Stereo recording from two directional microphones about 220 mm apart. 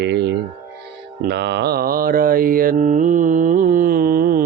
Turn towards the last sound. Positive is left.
turn(degrees=-40)  # may be behind; listen again after turning